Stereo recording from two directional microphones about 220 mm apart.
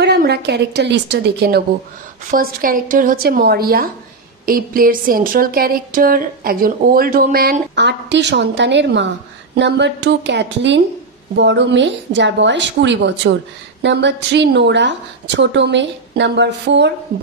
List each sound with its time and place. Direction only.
0.0 s a woman's voice: 50° right (ahead or behind)